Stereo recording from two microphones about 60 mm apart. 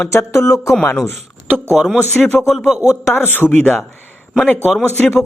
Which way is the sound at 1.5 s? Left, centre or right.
Right.